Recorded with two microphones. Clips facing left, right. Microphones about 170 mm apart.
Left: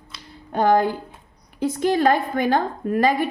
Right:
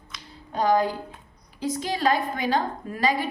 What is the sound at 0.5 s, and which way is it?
A woman's voice, 60° left (ahead or behind).